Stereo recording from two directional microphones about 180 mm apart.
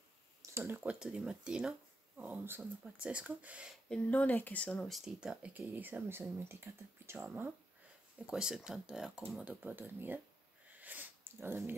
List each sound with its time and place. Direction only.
0.4 s a sound: 15° right (ahead or behind)
0.8 s speech: 5° right (ahead or behind)
3.9 s speech: 10° left (ahead or behind); by 10.2 s 10° right (ahead or behind)
10.8 s sniff: 10° right (ahead or behind)